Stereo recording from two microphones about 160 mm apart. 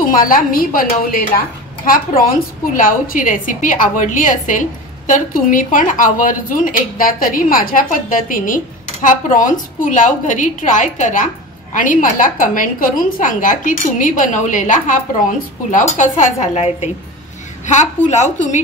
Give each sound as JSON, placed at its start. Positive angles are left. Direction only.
{"t": 0.1, "sound": "a woman's voice", "side_deg": 60}